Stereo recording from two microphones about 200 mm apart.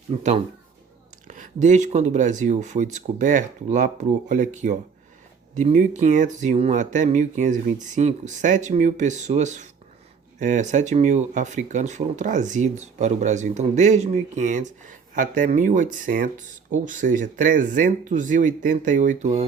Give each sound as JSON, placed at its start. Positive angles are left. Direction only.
{"t": 0.1, "sound": "speech", "side_deg": -35}